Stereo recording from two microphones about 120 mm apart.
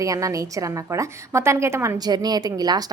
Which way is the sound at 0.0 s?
30° right (ahead or behind).